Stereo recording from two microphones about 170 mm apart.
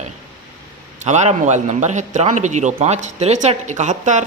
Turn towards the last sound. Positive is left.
turn(degrees=-45)  # may be behind; listen again after turning